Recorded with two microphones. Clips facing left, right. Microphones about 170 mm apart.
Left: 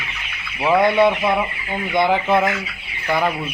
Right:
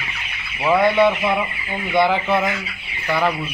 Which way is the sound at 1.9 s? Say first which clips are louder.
Even; 15° left (ahead or behind).